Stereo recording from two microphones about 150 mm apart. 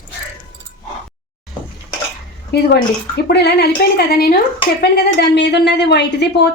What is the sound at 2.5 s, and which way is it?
A woman's voice, 90° left.